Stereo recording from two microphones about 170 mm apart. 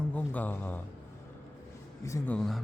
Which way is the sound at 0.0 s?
10° left (ahead or behind).